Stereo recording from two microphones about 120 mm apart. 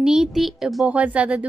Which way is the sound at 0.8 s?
10° right (ahead or behind).